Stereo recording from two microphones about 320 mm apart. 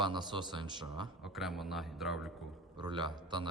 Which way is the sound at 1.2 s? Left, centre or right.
Centre.